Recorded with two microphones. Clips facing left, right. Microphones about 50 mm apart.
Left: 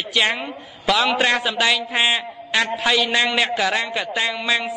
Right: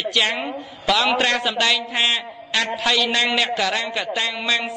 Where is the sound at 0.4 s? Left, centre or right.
Centre.